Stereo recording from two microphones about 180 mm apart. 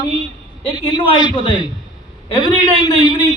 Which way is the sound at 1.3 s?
30° left (ahead or behind).